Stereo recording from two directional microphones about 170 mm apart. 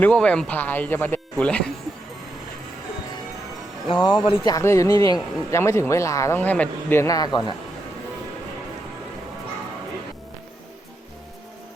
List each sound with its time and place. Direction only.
0.0 s speech: 5° left (ahead or behind)
3.8 s speech: 30° left (ahead or behind)